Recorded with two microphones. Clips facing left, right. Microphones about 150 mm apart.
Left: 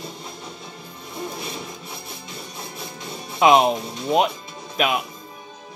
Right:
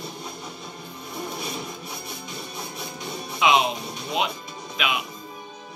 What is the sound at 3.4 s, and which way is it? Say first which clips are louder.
Speech: left 6 dB; 45° left (ahead or behind).